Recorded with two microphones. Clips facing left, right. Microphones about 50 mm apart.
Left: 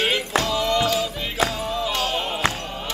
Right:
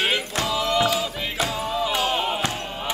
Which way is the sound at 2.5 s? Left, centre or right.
Centre.